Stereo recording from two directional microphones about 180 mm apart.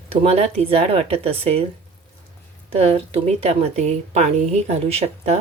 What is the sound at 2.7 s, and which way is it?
Speech, 35° right (ahead or behind).